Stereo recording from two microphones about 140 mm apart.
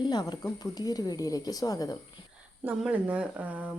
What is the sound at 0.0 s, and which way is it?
A woman's voice, 30° left (ahead or behind).